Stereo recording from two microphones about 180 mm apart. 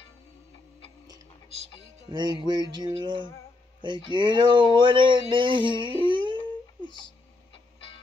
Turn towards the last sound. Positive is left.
turn(degrees=-25)  # may be behind; listen again after turning